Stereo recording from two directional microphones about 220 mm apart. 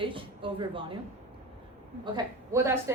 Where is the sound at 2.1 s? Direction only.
10° right (ahead or behind).